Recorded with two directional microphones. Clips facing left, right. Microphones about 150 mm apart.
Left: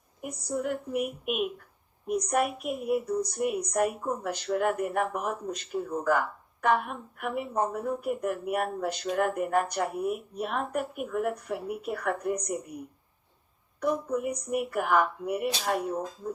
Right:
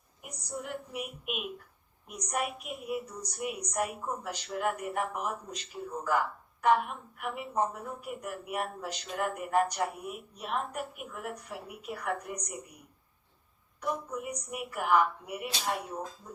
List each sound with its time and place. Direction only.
0.2 s speech: 50° left (ahead or behind)
13.8 s speech: 50° left (ahead or behind)